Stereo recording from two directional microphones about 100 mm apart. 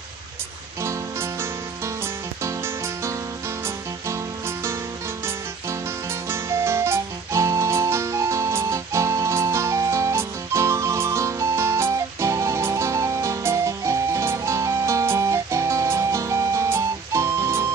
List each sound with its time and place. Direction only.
0.8 s music: 25° right (ahead or behind)